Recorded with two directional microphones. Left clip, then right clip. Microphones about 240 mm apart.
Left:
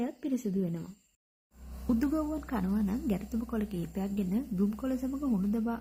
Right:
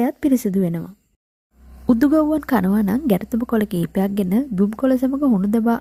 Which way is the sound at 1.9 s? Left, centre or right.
Right.